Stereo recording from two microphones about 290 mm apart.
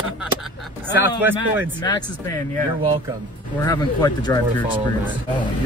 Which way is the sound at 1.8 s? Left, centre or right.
Centre.